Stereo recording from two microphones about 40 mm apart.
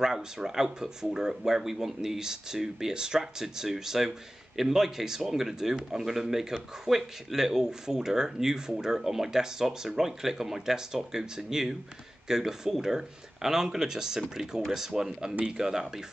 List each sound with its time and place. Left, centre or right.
0.0 s speech: centre